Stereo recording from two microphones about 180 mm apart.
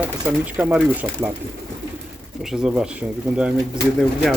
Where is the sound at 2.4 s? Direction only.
5° right (ahead or behind).